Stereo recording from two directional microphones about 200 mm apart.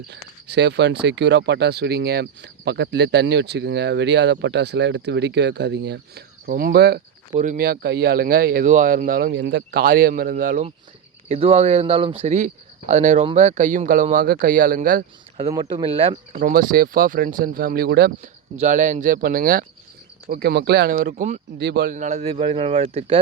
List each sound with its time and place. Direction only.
0.1 s speech: 60° right (ahead or behind)
7.3 s speech: 40° right (ahead or behind)
11.3 s speech: 30° right (ahead or behind)
15.4 s speech: 20° right (ahead or behind)
16.3 s speech: 45° right (ahead or behind)
18.2 s speech: 35° right (ahead or behind)
21.6 s speech: 55° right (ahead or behind); by 23.1 s 30° right (ahead or behind)